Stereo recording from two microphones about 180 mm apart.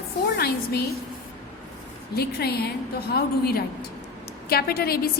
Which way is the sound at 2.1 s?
60° left (ahead or behind).